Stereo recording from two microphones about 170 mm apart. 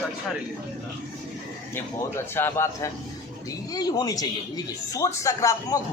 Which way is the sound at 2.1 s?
15° left (ahead or behind).